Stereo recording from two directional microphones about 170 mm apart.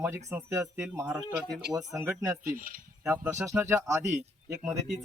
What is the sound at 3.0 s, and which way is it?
Speech, 15° right (ahead or behind).